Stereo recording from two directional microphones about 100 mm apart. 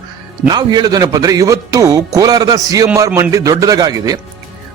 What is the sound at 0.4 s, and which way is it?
A man's voice, 45° right (ahead or behind).